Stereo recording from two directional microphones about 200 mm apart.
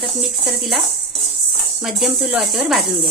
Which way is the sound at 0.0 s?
Centre (ahead or behind).